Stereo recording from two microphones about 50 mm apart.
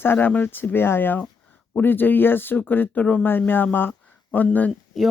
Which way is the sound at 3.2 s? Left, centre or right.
Left.